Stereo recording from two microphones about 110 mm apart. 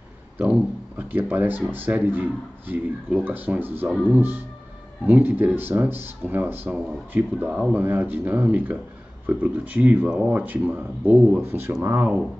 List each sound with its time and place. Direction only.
0.4 s speech: 15° right (ahead or behind)